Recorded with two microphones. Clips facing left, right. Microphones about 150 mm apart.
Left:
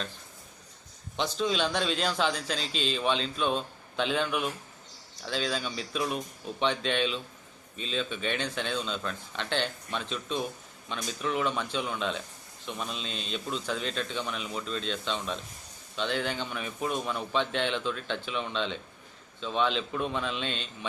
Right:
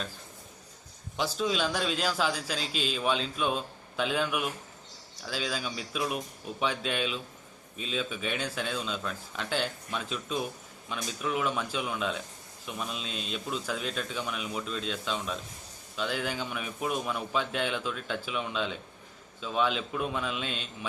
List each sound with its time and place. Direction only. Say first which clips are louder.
1.1 s a man's voice: left 1 dB; 5° right (ahead or behind)